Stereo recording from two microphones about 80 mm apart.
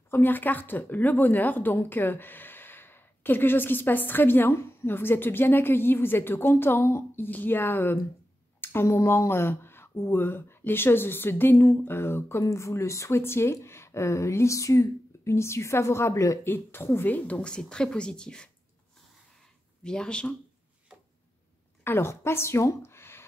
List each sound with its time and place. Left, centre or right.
0.1 s speech: left
16.4 s a woman's voice: left; by 18.5 s centre
19.8 s a woman's voice: centre
21.8 s a woman's voice: left